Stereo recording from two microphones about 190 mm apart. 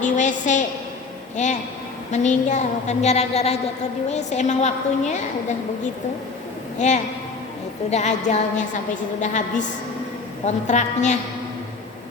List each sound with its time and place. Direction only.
0.0 s a woman's voice: 40° left (ahead or behind)
6.7 s a man's voice: 40° left (ahead or behind)